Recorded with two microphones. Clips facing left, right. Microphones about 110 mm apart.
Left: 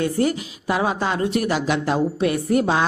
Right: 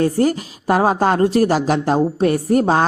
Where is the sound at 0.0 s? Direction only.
40° right (ahead or behind).